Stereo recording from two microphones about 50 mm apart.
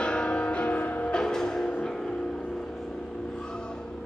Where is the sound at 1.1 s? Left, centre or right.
Centre.